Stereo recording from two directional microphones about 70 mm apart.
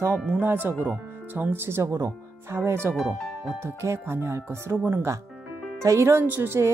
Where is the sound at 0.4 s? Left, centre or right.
Right.